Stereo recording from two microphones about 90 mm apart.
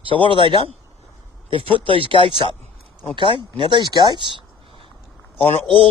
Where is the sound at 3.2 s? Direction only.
65° right (ahead or behind).